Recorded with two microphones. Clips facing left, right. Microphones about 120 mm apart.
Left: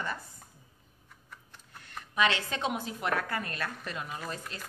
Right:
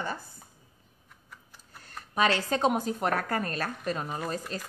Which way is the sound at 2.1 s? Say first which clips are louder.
Right 3 dB; 40° right (ahead or behind).